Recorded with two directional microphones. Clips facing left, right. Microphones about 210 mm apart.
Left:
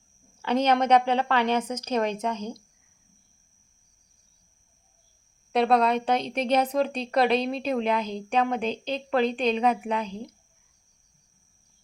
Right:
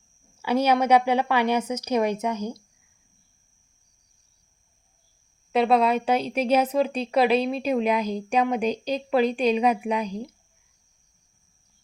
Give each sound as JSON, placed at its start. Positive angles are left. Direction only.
{"t": 0.4, "sound": "speech", "side_deg": -10}
{"t": 5.5, "sound": "speech", "side_deg": -5}